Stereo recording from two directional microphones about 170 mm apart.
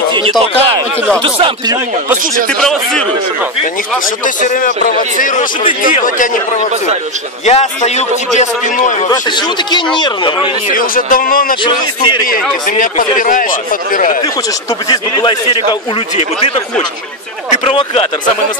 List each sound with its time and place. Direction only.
0.1 s speech: 25° right (ahead or behind)
2.5 s a man's voice: 5° left (ahead or behind)
4.2 s a man's voice: 50° left (ahead or behind)
9.1 s a man's voice: 25° left (ahead or behind)
10.7 s a man's voice: 55° left (ahead or behind)
11.6 s a man's voice: 25° left (ahead or behind)
12.6 s a man's voice: 50° left (ahead or behind)
14.9 s a man's voice: 30° left (ahead or behind)